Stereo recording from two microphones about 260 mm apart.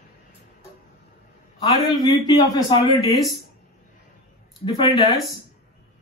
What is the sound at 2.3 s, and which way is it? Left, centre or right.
Speech, centre.